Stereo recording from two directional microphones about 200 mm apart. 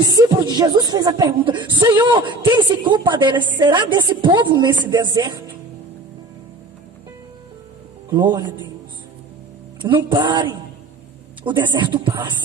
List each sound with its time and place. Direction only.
0.0 s speech: 20° right (ahead or behind)
8.1 s speech: 20° right (ahead or behind)
9.8 s speech: 25° right (ahead or behind)